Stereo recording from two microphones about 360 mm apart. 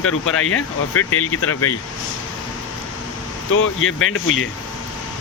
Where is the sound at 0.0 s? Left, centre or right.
Left.